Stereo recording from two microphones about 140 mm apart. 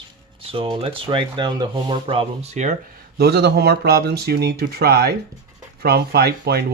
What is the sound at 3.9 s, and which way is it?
Speech, 90° right.